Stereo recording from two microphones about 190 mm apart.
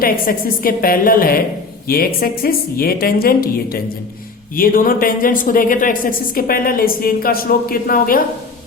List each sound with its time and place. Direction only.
0.0 s speech: 50° left (ahead or behind)